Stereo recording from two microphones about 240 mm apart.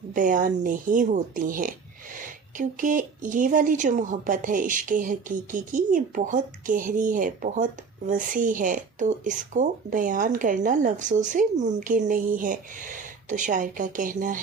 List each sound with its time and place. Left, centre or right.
0.1 s speech: right